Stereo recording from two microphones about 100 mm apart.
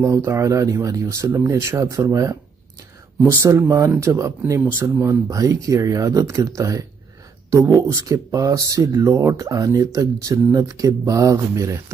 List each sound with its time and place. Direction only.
0.0 s speech: 30° right (ahead or behind)
3.4 s speech: 25° right (ahead or behind)
8.0 s speech: 35° right (ahead or behind)